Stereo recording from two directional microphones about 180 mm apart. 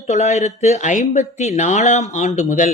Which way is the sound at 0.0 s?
40° left (ahead or behind).